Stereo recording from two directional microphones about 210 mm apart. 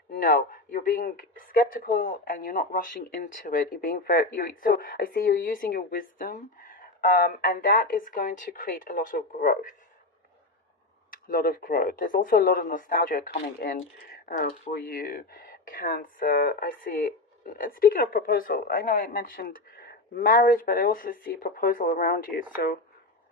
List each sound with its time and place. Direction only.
0.1 s speech: 40° left (ahead or behind)
11.1 s speech: 40° left (ahead or behind)